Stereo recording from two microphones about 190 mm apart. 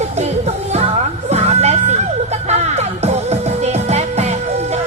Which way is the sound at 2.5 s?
35° right (ahead or behind).